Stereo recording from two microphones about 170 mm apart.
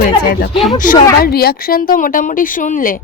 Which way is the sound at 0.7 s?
50° left (ahead or behind).